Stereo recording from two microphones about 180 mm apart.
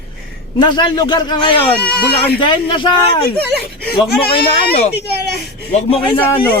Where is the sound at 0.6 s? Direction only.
25° left (ahead or behind).